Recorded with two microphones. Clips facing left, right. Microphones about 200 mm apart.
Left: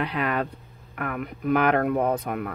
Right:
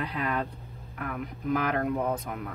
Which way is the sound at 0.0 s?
70° left (ahead or behind).